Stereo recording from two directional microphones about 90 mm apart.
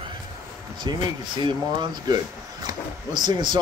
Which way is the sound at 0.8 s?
55° right (ahead or behind).